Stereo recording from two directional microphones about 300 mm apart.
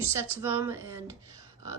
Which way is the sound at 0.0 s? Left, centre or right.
Centre.